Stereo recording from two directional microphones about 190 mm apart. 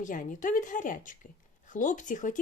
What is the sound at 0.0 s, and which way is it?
Speech, 45° left (ahead or behind).